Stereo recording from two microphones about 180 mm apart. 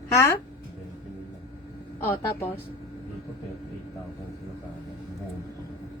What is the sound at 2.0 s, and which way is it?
Speech, 10° left (ahead or behind).